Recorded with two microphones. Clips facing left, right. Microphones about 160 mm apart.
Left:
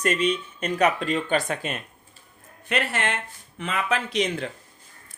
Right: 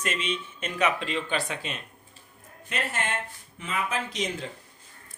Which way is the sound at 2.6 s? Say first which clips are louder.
Left 5 dB; 75° left (ahead or behind).